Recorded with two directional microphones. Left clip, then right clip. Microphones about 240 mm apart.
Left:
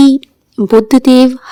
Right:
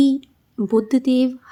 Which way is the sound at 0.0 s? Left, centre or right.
Left.